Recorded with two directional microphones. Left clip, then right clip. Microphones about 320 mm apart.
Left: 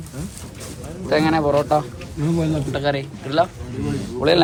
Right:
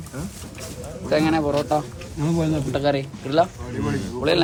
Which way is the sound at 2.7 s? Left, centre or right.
Centre.